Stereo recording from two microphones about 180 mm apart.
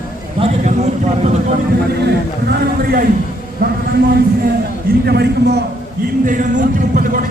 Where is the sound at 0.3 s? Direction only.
35° right (ahead or behind).